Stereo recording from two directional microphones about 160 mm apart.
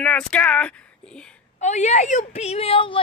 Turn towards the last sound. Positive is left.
turn(degrees=35)  # may be behind; listen again after turning